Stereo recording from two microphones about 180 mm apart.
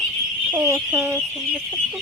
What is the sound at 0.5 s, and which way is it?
Speech, 15° right (ahead or behind).